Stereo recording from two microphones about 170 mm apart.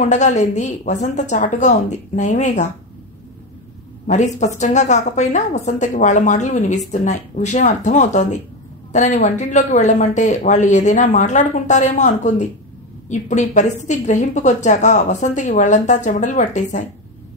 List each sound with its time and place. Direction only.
0.1 s speech: 45° left (ahead or behind)
4.1 s speech: 45° left (ahead or behind)